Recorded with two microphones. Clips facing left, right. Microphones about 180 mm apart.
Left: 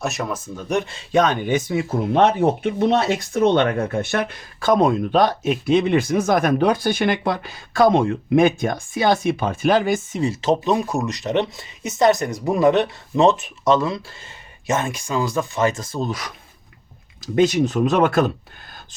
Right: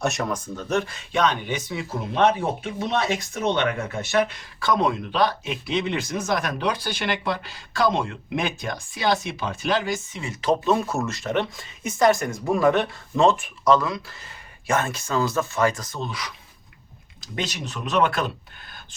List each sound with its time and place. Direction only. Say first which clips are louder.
0.0 s speech: even; centre (ahead or behind)
0.5 s speech: left 3 dB; 15° left (ahead or behind)
1.1 s speech: left 5 dB; 45° left (ahead or behind)
3.3 s speech: left 8 dB; 50° left (ahead or behind)
10.4 s speech: even; 20° left (ahead or behind)
16.0 s speech: left 6 dB; 45° left (ahead or behind)
17.3 s speech: left 14 dB; 50° left (ahead or behind)